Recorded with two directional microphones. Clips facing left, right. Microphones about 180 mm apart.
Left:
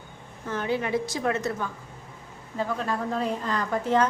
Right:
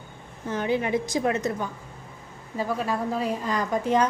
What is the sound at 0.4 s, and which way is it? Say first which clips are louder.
A woman's voice: right 2 dB; 15° right (ahead or behind).